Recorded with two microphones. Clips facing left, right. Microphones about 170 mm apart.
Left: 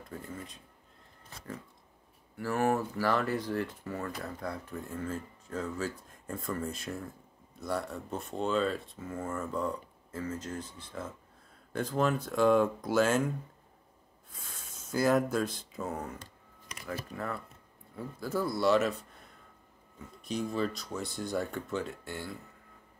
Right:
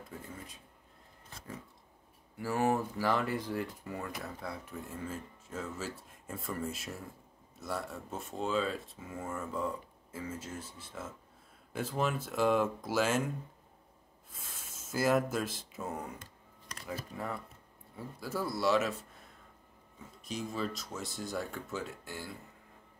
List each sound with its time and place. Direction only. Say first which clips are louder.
2.3 s speech: left 1 dB; 15° right (ahead or behind)
14.3 s speech: left 1 dB; centre (ahead or behind)
17.9 s speech: left 4 dB; 5° right (ahead or behind)
20.2 s speech: left 4 dB; centre (ahead or behind)